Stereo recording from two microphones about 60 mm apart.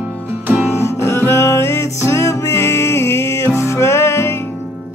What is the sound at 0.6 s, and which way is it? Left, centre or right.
Music, left.